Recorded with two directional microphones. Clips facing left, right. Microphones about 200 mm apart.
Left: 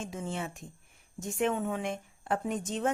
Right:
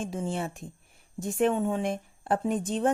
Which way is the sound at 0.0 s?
30° right (ahead or behind).